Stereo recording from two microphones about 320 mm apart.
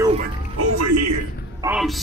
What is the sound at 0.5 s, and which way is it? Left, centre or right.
Speech, right.